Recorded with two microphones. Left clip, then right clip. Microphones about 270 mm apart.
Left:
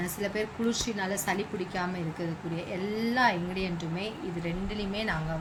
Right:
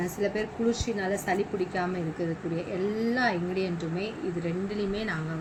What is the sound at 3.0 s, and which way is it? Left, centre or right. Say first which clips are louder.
A woman's voice: left 3 dB; left.